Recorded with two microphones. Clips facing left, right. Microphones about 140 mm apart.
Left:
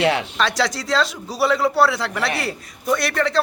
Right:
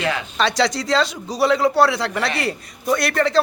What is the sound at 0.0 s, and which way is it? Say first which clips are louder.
Speech: left 4 dB; 75° left (ahead or behind).